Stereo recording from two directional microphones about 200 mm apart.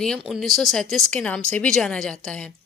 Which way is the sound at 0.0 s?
Centre (ahead or behind).